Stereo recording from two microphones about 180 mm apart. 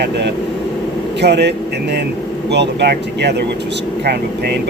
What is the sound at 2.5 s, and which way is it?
Speech, 70° right (ahead or behind).